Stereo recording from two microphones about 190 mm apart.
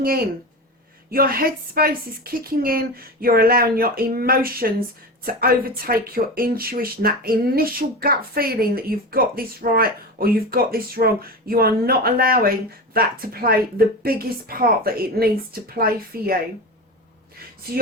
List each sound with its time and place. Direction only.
1.1 s speech: 50° right (ahead or behind)